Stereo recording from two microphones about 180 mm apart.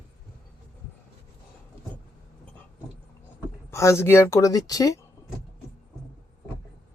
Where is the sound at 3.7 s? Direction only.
15° left (ahead or behind).